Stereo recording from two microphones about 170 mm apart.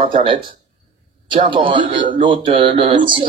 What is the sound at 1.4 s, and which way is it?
Speech, 30° right (ahead or behind).